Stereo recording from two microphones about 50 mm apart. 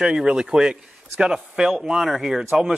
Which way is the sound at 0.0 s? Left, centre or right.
Centre.